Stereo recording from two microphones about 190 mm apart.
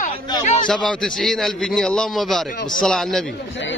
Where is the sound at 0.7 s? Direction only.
Centre (ahead or behind).